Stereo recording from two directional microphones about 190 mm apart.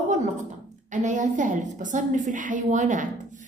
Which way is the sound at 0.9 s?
40° right (ahead or behind).